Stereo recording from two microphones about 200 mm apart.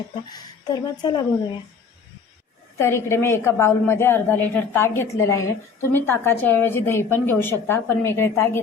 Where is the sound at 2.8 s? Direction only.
10° left (ahead or behind).